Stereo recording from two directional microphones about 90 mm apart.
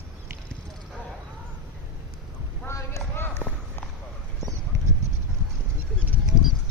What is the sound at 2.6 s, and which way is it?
Basketball bounce, 30° left (ahead or behind).